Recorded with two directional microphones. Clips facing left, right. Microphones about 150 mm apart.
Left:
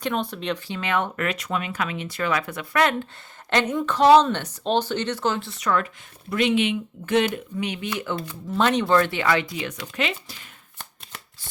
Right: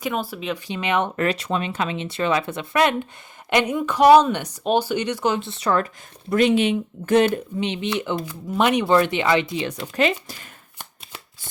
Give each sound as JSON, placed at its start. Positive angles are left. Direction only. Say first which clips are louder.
{"t": 0.0, "sound": "speech", "louder": "even", "side_deg": -5}
{"t": 0.7, "sound": "speech", "louder": "right 5 dB", "side_deg": -20}
{"t": 1.2, "sound": "speech", "louder": "right 4 dB", "side_deg": -30}
{"t": 7.6, "sound": "speech", "louder": "right 3 dB", "side_deg": -25}